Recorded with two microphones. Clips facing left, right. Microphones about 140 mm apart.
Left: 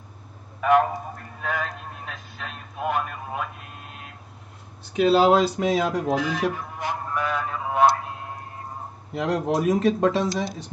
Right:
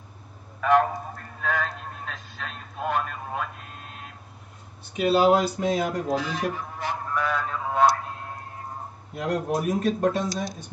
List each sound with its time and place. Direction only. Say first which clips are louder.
1.4 s a sound: right 1 dB; 5° left (ahead or behind)
2.0 s radio: even; 5° left (ahead or behind)
4.9 s speech: left 2 dB; 90° left
6.1 s speech: left 3 dB; 15° left (ahead or behind)
6.7 s a sound: left 1 dB; 10° left (ahead or behind)
9.1 s speech: left 3 dB; 85° left